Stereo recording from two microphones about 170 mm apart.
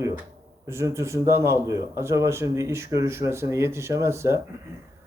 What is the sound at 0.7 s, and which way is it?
Speech, 15° right (ahead or behind).